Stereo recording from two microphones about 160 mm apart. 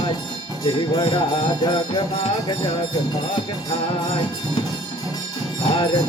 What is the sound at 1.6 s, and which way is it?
Music, 30° left (ahead or behind).